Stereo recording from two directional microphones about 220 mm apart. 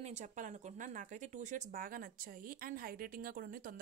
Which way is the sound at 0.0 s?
30° right (ahead or behind).